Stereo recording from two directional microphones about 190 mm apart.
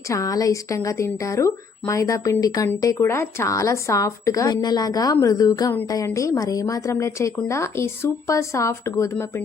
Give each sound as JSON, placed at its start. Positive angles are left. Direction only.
{"t": 0.1, "sound": "speech", "side_deg": 15}